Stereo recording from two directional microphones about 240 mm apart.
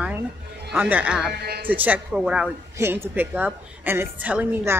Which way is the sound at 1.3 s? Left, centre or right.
Right.